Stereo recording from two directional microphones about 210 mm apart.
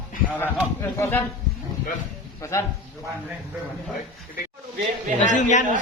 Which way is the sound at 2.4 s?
15° left (ahead or behind).